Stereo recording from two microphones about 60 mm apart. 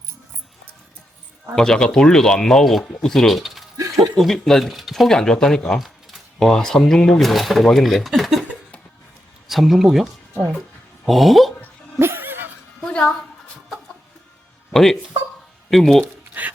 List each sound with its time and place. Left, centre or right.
1.5 s speech: centre
3.8 s a sound: right
4.2 s speech: centre
9.5 s speech: centre
11.9 s a sound: right
12.8 s music: centre
14.7 s speech: centre
16.4 s music: right